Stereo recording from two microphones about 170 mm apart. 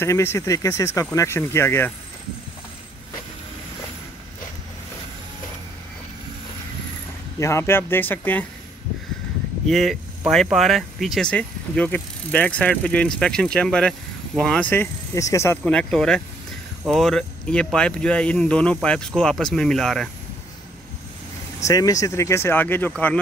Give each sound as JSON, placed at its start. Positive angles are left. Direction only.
{"t": 0.0, "sound": "speech", "side_deg": 15}
{"t": 7.3, "sound": "speech", "side_deg": 15}
{"t": 9.7, "sound": "speech", "side_deg": 0}
{"t": 21.6, "sound": "speech", "side_deg": 20}